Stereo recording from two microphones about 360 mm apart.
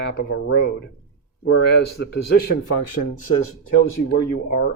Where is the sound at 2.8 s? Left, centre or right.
Left.